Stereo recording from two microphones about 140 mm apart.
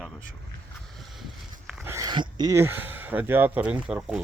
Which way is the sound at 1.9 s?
25° right (ahead or behind).